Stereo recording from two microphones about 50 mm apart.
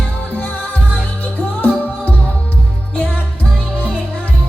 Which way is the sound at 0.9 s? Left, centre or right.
Left.